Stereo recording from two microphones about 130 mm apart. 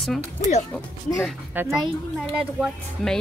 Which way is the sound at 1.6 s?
15° right (ahead or behind).